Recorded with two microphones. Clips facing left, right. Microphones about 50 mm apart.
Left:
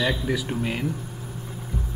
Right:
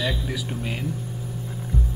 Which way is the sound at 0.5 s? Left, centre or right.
Centre.